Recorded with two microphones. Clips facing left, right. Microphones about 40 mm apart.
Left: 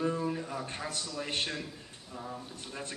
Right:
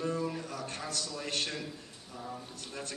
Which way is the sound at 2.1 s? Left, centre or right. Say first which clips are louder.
Left 1 dB; centre.